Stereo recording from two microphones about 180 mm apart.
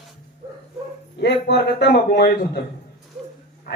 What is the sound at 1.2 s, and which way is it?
Speech, 65° left (ahead or behind).